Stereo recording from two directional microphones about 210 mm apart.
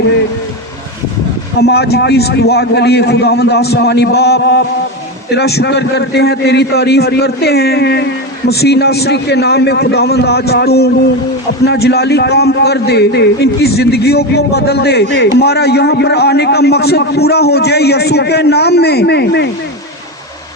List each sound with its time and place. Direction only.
1.5 s a man's voice: 50° left (ahead or behind)